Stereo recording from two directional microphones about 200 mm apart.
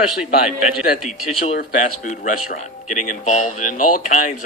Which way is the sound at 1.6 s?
40° left (ahead or behind).